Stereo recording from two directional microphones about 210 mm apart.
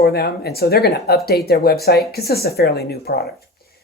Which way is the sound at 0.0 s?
50° left (ahead or behind).